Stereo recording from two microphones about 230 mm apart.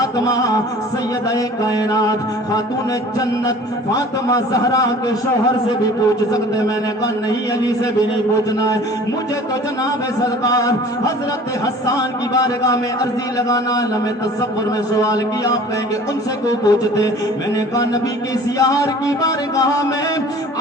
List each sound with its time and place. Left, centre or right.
0.0 s music: centre
1.6 s a man's voice: centre
3.9 s a man's voice: centre
10.4 s a man's voice: centre
15.0 s a man's voice: centre
18.6 s a man's voice: centre